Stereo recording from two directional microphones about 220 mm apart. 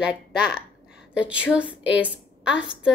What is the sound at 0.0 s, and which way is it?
A woman's voice, 5° right (ahead or behind).